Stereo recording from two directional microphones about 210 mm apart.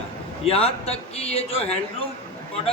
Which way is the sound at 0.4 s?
30° left (ahead or behind).